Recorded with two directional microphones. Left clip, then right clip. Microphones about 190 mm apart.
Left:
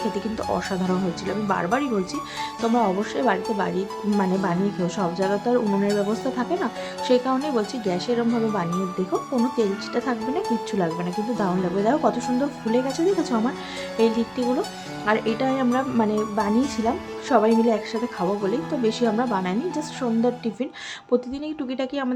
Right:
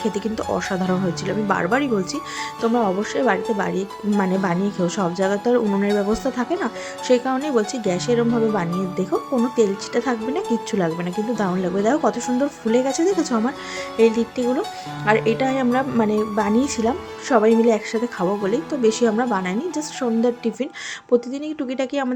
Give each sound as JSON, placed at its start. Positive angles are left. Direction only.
{"t": 0.1, "sound": "speech", "side_deg": -15}